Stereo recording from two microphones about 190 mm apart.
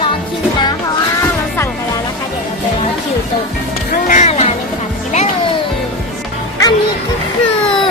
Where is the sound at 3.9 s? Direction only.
40° left (ahead or behind).